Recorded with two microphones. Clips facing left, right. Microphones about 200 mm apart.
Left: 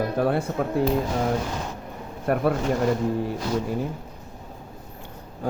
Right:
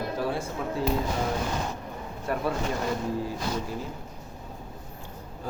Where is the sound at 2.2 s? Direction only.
55° left (ahead or behind).